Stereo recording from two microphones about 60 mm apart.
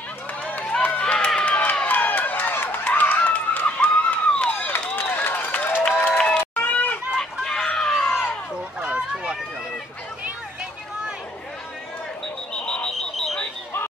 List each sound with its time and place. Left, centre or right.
0.5 s run: left
4.0 s a sound: left
6.1 s run: left
7.2 s chicken: centre
8.8 s run: centre
12.5 s alarm: centre
13.1 s alarm: centre